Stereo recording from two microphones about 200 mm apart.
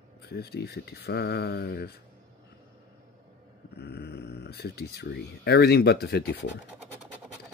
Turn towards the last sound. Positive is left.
turn(degrees=55)  # may be behind; listen again after turning